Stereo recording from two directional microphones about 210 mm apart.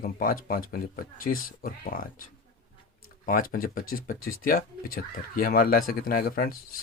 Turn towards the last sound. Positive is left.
turn(degrees=45)  # may be behind; listen again after turning